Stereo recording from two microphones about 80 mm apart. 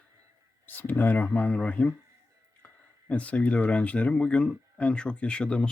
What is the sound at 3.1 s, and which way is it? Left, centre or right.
Speech, centre.